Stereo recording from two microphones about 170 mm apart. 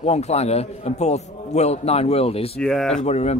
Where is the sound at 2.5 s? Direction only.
5° left (ahead or behind).